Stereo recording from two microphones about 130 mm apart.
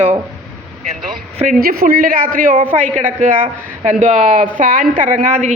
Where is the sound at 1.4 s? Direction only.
90° right.